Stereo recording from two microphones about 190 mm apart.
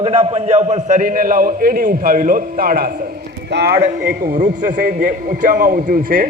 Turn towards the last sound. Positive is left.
turn(degrees=-50)  # may be behind; listen again after turning